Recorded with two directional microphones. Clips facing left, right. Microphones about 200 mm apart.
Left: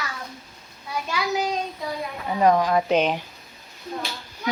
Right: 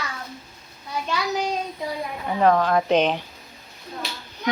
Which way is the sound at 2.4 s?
10° left (ahead or behind).